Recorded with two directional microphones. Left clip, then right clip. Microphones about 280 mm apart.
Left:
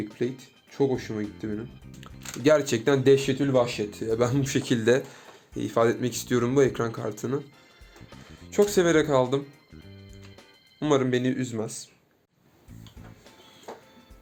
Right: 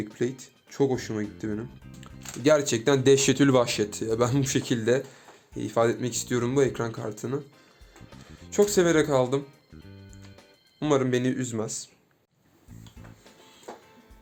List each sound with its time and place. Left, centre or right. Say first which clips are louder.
0.0 s speech: even; centre
3.2 s speech: right 2 dB; right
4.0 s speech: left 2 dB; centre
10.1 s music: left 2 dB; centre